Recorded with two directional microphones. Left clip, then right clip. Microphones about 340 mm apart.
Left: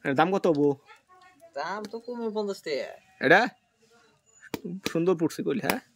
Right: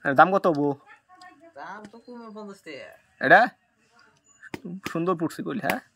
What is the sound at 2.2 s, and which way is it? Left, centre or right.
Speech, left.